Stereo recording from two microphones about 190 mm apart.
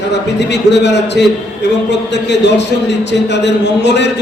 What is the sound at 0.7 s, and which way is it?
A man's voice, 65° left (ahead or behind).